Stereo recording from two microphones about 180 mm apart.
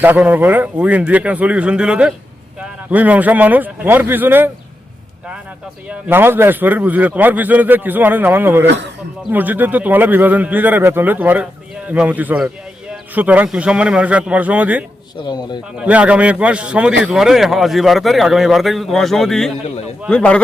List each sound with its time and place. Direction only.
0.0 s a man's voice: 10° right (ahead or behind)
5.9 s a man's voice: 10° right (ahead or behind)
8.6 s speech: 70° right (ahead or behind)
9.3 s a man's voice: 10° right (ahead or behind); by 20.4 s 5° left (ahead or behind)